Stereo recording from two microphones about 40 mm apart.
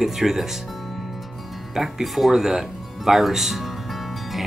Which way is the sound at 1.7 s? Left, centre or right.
Centre.